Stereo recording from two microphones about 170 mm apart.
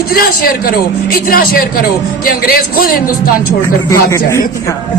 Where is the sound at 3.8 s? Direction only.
15° left (ahead or behind).